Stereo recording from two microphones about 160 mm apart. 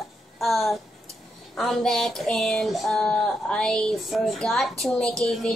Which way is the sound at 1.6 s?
Centre (ahead or behind).